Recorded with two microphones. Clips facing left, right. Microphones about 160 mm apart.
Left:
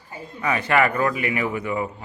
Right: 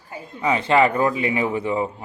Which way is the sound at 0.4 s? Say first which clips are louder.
Right 3 dB; 20° right (ahead or behind).